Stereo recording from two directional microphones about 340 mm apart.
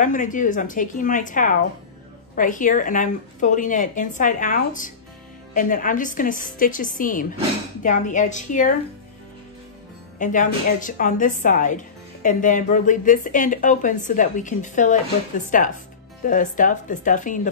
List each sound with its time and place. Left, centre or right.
0.0 s a woman's voice: left
10.1 s a woman's voice: left